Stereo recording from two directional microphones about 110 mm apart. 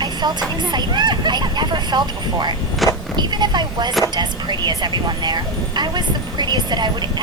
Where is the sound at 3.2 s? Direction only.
40° right (ahead or behind).